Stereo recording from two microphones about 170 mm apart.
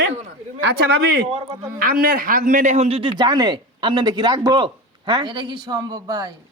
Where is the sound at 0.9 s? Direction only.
70° right (ahead or behind).